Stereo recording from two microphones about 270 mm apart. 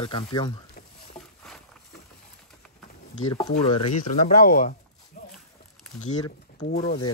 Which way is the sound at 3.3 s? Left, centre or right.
Centre.